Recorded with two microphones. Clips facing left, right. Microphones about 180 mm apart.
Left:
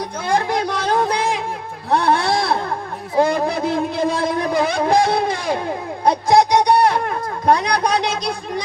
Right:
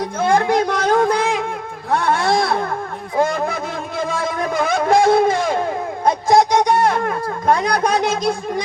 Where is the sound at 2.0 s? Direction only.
45° right (ahead or behind).